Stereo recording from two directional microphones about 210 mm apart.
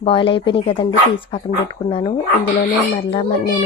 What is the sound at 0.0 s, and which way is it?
Speech, 25° left (ahead or behind).